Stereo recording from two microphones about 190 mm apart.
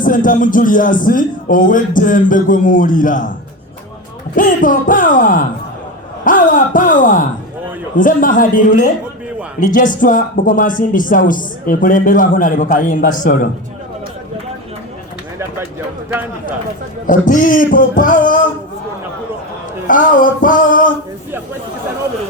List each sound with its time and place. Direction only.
0.0 s speech: 45° left (ahead or behind)
4.4 s speech: 45° left (ahead or behind)
17.1 s speech: 45° left (ahead or behind)
19.9 s speech: 45° left (ahead or behind)